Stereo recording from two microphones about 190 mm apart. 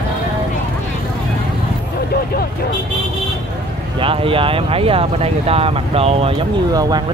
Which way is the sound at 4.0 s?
30° right (ahead or behind).